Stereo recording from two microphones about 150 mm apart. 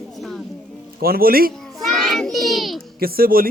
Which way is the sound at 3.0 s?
85° right.